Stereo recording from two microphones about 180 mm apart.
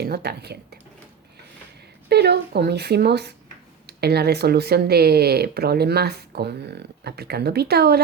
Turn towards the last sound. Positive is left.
turn(degrees=-60)  # may be behind; listen again after turning